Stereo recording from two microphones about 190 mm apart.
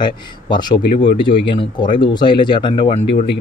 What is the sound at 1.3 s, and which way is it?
Speech, 45° left (ahead or behind).